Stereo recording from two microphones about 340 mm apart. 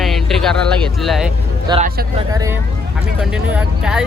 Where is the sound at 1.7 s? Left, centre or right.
Right.